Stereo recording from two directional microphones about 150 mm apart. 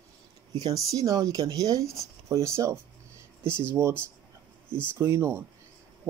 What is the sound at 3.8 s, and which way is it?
Speech, 20° right (ahead or behind).